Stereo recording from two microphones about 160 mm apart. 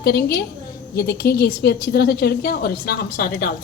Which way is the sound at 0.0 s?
80° left.